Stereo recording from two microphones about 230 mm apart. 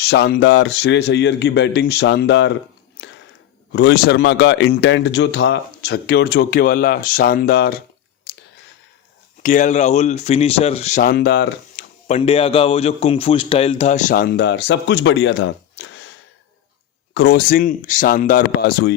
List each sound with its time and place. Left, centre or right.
0.0 s speech: left
3.7 s speech: left
9.4 s a man's voice: left
12.0 s a man's voice: left
17.2 s a man's voice: left